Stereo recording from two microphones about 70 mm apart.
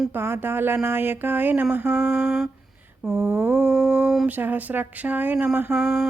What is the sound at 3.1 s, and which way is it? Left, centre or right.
Speech, right.